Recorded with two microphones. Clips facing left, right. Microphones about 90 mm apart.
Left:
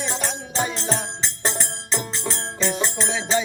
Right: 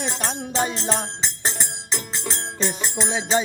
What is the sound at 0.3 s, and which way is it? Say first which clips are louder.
Music: right 2 dB; 40° right (ahead or behind).